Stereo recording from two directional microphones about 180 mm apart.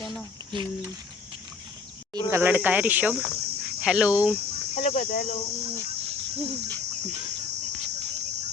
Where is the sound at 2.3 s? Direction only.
10° right (ahead or behind).